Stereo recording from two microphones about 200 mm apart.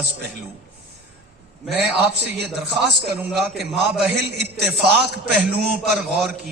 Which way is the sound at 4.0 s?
55° right (ahead or behind).